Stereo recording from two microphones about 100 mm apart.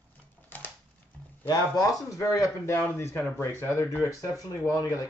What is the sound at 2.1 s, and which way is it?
Speech, 30° left (ahead or behind).